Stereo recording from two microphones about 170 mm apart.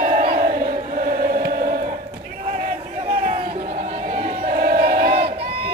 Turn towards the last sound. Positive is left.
turn(degrees=-60)  # may be behind; listen again after turning